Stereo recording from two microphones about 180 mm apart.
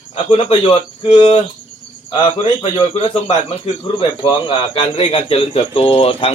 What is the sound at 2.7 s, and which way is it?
Speech, 30° left (ahead or behind).